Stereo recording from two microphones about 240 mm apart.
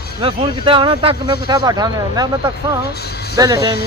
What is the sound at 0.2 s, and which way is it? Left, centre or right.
Speech, right.